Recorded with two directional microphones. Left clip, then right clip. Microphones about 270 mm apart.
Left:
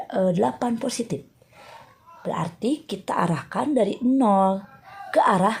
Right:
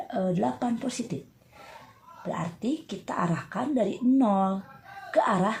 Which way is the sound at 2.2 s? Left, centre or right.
Left.